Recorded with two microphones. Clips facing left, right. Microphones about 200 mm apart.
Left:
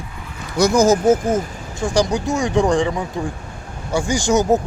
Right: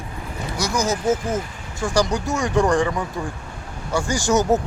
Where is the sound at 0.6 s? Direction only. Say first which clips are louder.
Left 9 dB; 50° left (ahead or behind).